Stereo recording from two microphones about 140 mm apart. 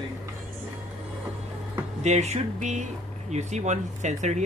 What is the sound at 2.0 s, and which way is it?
Speech, 55° right (ahead or behind).